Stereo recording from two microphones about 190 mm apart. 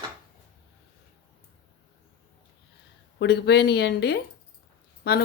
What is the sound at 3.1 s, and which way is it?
Speech, 60° left (ahead or behind).